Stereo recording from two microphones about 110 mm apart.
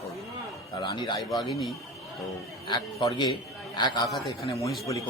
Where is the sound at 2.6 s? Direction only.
35° left (ahead or behind).